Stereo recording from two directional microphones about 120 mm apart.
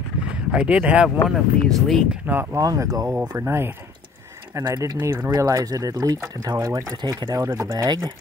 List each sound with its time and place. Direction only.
0.5 s speech: 10° right (ahead or behind)
2.5 s speech: 30° right (ahead or behind)
3.1 s speech: 15° right (ahead or behind)